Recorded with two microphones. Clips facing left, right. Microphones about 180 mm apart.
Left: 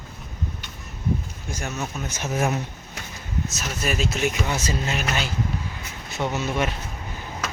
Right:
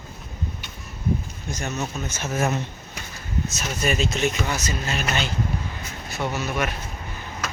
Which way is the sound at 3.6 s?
5° left (ahead or behind).